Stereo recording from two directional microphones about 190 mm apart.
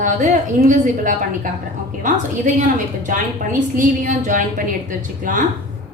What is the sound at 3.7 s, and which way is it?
A woman's voice, 45° right (ahead or behind).